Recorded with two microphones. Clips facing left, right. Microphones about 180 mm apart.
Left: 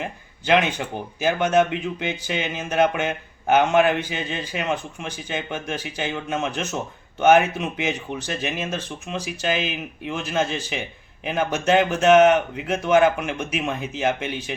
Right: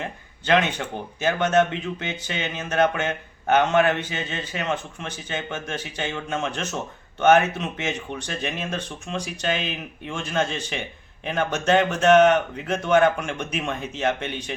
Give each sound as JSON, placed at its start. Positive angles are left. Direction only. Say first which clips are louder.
{"t": 0.0, "sound": "speech", "louder": "left 2 dB", "side_deg": 10}